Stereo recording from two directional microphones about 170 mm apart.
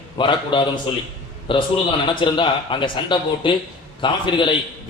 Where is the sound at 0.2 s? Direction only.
30° left (ahead or behind).